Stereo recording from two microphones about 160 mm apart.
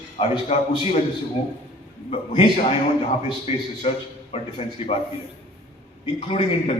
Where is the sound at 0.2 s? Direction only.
40° left (ahead or behind).